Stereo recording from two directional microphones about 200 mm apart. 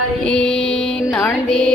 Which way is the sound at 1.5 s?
5° left (ahead or behind).